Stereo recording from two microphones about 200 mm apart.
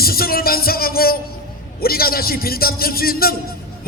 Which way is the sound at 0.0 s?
50° left (ahead or behind).